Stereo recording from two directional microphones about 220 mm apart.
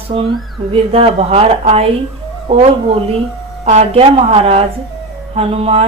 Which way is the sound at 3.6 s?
30° right (ahead or behind).